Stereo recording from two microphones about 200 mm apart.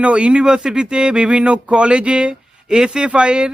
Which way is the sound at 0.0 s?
5° right (ahead or behind).